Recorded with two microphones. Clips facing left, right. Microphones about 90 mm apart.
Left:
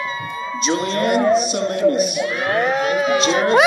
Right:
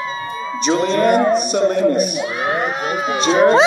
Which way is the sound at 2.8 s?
35° right (ahead or behind).